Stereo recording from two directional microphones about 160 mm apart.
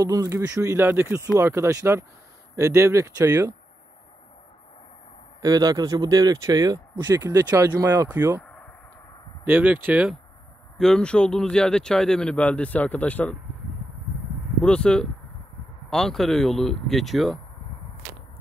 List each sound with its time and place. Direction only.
0.0 s speech: 20° right (ahead or behind)
5.4 s speech: 25° right (ahead or behind)
9.4 s speech: 10° right (ahead or behind)
10.8 s speech: 5° left (ahead or behind)
14.6 s speech: 5° left (ahead or behind)